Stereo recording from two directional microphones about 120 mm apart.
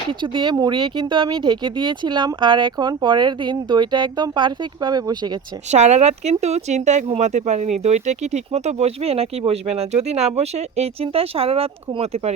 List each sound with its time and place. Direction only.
0.1 s speech: 40° right (ahead or behind)
5.7 s speech: 70° right (ahead or behind)